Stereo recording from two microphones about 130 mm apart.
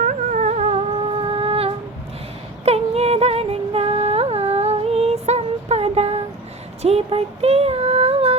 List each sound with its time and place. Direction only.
0.0 s music: 80° right; by 1.7 s 50° right (ahead or behind)
2.6 s a sound: 55° right (ahead or behind)
6.8 s child singing: 50° right (ahead or behind)